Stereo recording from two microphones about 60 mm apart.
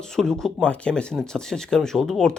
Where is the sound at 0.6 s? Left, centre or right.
Centre.